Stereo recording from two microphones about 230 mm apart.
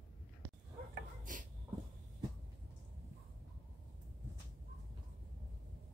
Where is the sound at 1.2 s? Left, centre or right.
Right.